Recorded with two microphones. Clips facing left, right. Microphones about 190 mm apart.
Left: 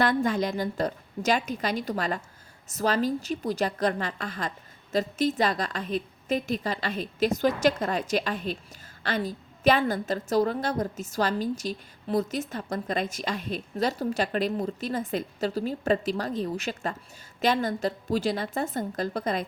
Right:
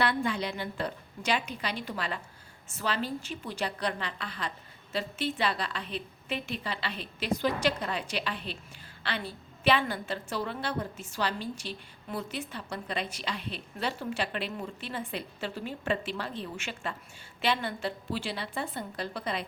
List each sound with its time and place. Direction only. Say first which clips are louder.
0.0 s a woman's voice: left 5 dB; 45° left (ahead or behind)